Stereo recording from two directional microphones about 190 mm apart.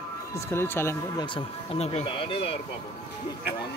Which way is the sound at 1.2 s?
30° left (ahead or behind).